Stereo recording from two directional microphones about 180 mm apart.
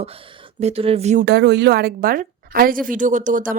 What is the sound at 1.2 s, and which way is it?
Speech, 70° right (ahead or behind).